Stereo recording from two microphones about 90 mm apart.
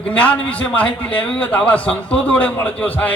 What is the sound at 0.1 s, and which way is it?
A man's voice, 15° left (ahead or behind).